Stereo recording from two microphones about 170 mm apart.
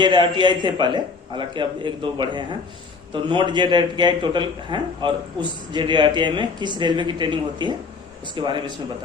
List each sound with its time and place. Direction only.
0.0 s a man's voice: 25° right (ahead or behind)